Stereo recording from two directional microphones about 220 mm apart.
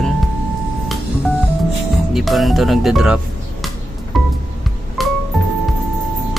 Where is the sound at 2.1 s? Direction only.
Centre (ahead or behind).